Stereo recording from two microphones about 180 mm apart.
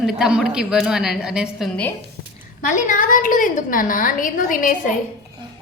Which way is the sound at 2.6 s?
45° left (ahead or behind).